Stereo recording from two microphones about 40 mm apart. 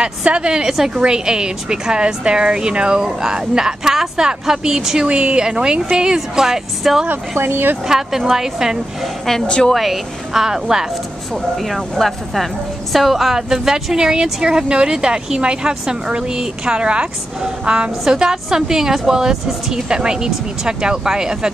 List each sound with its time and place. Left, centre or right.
0.0 s a woman's voice: right
5.0 s speech: right; by 7.0 s centre
7.3 s speech: right
7.9 s a woman's voice: centre
9.5 s speech: centre
9.8 s a woman's voice: centre
11.5 s a woman's voice: centre